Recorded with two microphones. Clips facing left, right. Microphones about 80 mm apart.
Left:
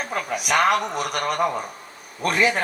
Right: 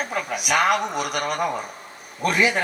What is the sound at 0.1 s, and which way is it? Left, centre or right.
A man's voice, left.